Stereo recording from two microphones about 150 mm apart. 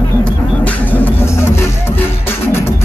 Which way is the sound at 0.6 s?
15° left (ahead or behind).